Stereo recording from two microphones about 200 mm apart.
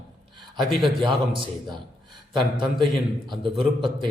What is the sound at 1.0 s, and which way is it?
A man's voice, 25° right (ahead or behind).